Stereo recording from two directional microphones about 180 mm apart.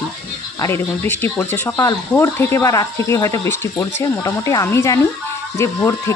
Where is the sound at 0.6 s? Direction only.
10° left (ahead or behind).